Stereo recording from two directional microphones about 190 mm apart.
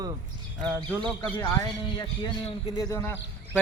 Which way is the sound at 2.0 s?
25° left (ahead or behind).